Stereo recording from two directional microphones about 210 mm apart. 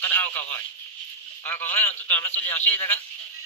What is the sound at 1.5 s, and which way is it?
A man's voice, 10° left (ahead or behind).